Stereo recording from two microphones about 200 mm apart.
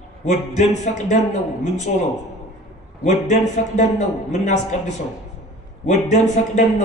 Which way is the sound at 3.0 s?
35° left (ahead or behind).